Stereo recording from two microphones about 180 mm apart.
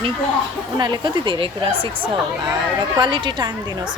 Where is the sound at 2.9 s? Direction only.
25° right (ahead or behind).